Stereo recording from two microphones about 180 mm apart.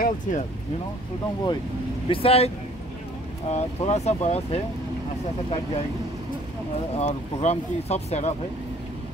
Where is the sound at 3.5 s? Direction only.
40° left (ahead or behind).